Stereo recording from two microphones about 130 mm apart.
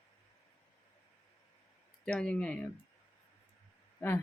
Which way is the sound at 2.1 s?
10° left (ahead or behind).